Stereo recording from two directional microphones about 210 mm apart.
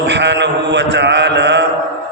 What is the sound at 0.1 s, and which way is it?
Mantra, 55° right (ahead or behind).